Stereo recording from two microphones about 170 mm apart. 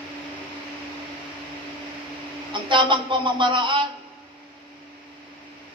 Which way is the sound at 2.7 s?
30° right (ahead or behind).